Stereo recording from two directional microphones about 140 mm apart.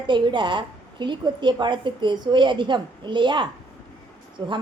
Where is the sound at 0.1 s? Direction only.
35° right (ahead or behind).